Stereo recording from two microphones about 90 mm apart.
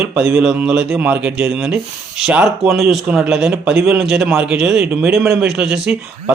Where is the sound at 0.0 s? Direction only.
10° right (ahead or behind).